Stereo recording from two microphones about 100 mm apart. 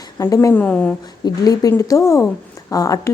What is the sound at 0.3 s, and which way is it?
Speech, 20° left (ahead or behind).